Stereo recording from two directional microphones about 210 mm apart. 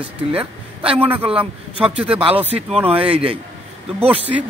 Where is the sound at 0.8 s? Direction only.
10° right (ahead or behind).